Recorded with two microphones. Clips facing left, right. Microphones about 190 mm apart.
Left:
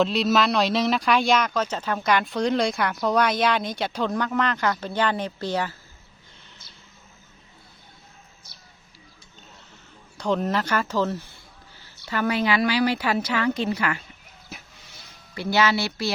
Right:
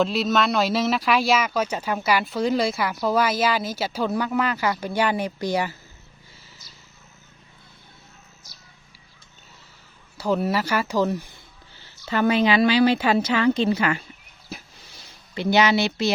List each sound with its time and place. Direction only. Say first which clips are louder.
0.0 s speech: even; centre (ahead or behind)
10.2 s a woman's voice: right 1 dB; 5° right (ahead or behind); by 14.0 s 25° right (ahead or behind)
14.5 s a sound: right 5 dB; 35° right (ahead or behind)
15.4 s a woman's voice: right 3 dB; 20° right (ahead or behind)